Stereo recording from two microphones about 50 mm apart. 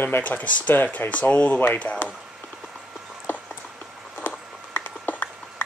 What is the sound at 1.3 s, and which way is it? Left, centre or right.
Speech, left.